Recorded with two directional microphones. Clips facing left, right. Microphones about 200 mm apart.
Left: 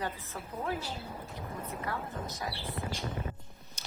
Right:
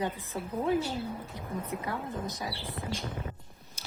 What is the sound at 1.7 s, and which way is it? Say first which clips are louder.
Speech: right 5 dB; 20° right (ahead or behind).